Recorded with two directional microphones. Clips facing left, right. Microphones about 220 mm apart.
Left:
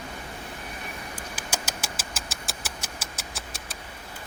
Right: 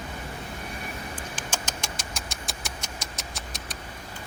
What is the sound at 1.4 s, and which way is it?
Vehicle, 10° left (ahead or behind).